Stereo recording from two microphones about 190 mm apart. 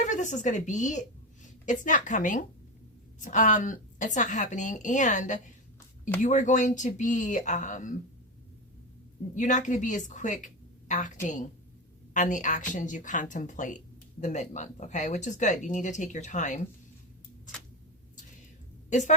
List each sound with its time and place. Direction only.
0.0 s a woman's voice: 40° left (ahead or behind)
9.3 s a woman's voice: 40° left (ahead or behind)
18.9 s a woman's voice: 40° left (ahead or behind)